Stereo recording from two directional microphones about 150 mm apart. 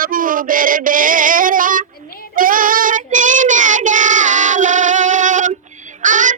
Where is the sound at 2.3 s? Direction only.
65° right (ahead or behind).